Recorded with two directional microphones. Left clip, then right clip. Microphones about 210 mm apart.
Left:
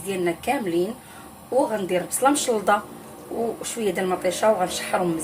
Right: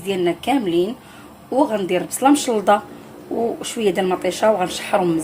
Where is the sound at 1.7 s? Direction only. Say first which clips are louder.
Right 4 dB; 25° right (ahead or behind).